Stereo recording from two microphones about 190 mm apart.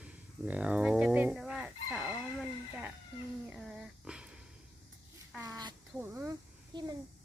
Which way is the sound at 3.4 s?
5° right (ahead or behind).